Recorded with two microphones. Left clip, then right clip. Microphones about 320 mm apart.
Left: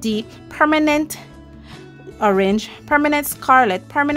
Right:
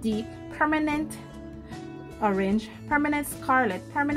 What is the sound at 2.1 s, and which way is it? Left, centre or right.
A woman's voice, left.